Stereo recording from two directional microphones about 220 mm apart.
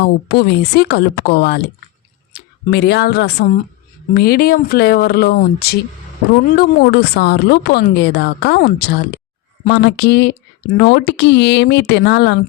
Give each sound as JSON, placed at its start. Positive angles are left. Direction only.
{"t": 0.0, "sound": "speech", "side_deg": 45}